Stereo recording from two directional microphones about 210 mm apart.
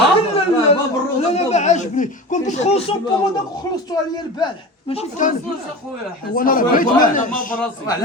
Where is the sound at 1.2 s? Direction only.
30° left (ahead or behind).